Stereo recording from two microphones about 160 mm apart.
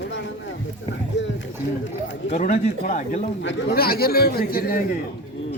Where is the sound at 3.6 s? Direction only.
70° left (ahead or behind).